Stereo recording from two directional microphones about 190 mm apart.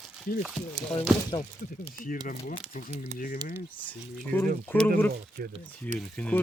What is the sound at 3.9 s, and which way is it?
Speech, 10° left (ahead or behind).